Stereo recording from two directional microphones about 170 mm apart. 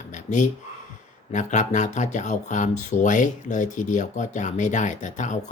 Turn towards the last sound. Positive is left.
turn(degrees=45)  # may be behind; listen again after turning